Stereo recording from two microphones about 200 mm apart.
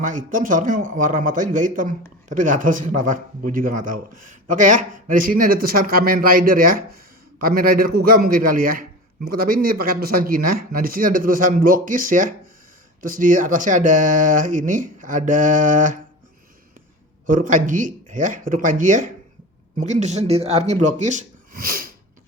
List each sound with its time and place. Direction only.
0.0 s speech: 40° right (ahead or behind)
17.2 s speech: 40° right (ahead or behind)